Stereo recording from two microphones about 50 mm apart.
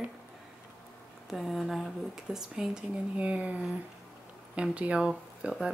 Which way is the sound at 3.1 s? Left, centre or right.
Right.